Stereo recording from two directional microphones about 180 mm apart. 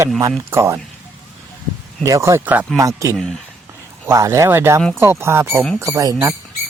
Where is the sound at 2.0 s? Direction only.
15° right (ahead or behind).